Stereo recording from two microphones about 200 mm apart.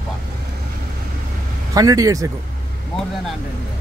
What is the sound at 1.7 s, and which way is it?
Speech, 15° right (ahead or behind).